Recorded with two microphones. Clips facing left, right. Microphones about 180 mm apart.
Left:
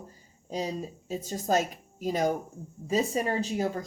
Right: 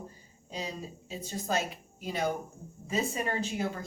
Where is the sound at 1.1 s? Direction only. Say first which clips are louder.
Left 6 dB; 45° left (ahead or behind).